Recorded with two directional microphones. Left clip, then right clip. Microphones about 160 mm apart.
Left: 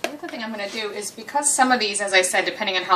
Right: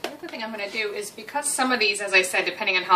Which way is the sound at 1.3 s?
25° left (ahead or behind).